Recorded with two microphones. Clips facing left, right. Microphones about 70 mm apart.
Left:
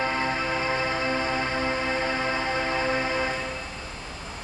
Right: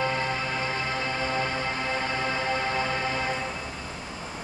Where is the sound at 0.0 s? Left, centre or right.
Left.